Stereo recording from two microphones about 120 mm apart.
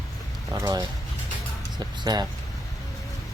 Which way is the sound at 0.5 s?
35° right (ahead or behind).